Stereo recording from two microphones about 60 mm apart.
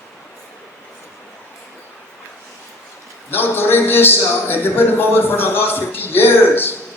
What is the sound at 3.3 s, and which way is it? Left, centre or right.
Speech, left.